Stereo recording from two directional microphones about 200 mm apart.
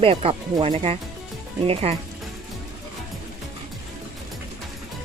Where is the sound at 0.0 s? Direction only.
30° right (ahead or behind).